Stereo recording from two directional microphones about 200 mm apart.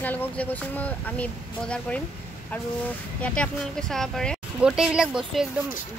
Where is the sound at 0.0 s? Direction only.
10° left (ahead or behind).